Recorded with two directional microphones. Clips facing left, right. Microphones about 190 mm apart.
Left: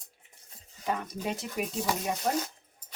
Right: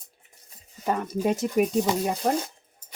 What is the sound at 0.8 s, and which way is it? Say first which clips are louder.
Speech: right 7 dB; 45° right (ahead or behind).